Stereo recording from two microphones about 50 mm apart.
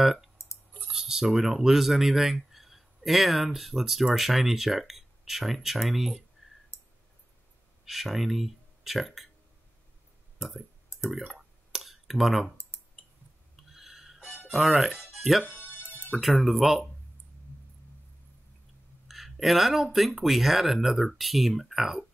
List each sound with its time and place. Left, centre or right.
0.0 s speech: centre
6.7 s clicking: left
7.8 s speech: centre
11.0 s speech: centre
11.3 s clicking: centre
13.7 s a sound: centre
14.5 s speech: centre
15.0 s music: centre
15.7 s music: left
16.2 s speech: centre
19.0 s speech: centre